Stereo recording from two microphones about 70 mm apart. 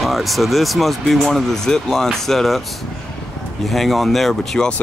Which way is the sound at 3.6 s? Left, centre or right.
Centre.